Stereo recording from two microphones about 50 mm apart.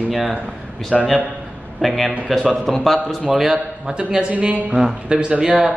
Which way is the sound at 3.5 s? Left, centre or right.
Centre.